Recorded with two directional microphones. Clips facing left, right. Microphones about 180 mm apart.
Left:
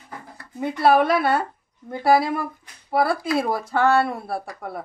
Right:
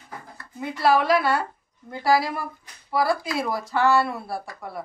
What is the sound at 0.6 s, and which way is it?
A woman's voice, 55° left (ahead or behind).